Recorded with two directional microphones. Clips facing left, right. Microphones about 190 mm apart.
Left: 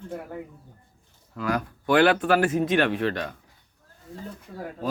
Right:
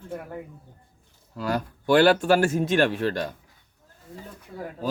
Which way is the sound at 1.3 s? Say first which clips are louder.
Even; 35° right (ahead or behind).